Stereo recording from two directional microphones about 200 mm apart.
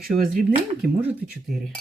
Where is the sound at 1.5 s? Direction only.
Centre (ahead or behind).